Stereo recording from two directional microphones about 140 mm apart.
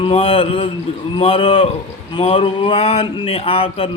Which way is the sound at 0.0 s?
40° left (ahead or behind).